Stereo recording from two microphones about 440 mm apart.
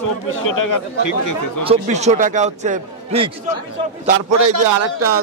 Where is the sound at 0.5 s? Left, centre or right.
Left.